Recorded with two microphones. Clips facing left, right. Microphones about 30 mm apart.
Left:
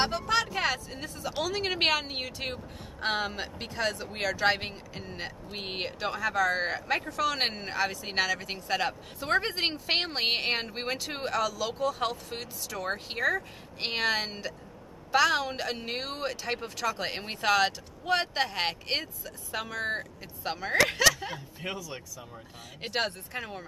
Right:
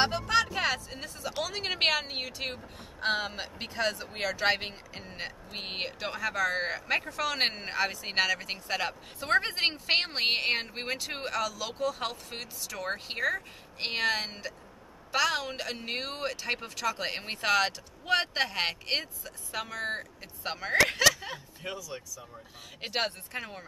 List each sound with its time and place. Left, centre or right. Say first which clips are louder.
0.0 s music: right 1 dB; centre
1.4 s a woman's voice: left 1 dB; centre
21.5 s speech: left 2 dB; left
22.8 s a woman's voice: left 1 dB; centre